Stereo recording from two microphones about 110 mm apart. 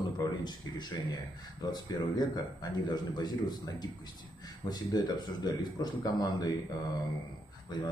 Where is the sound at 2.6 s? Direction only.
40° left (ahead or behind).